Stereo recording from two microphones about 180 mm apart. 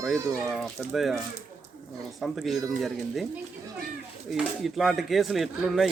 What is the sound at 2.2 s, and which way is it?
Speech, centre (ahead or behind).